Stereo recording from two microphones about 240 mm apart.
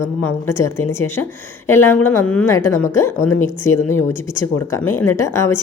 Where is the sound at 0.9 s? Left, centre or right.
Centre.